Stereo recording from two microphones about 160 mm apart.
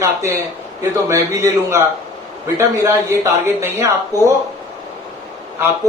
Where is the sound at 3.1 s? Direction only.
15° right (ahead or behind).